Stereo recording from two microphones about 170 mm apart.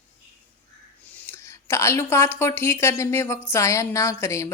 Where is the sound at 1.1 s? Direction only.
10° left (ahead or behind).